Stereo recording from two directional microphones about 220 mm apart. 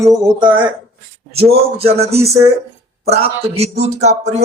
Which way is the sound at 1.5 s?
25° right (ahead or behind).